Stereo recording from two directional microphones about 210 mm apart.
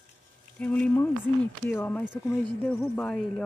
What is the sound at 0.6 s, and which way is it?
Speech, 5° left (ahead or behind).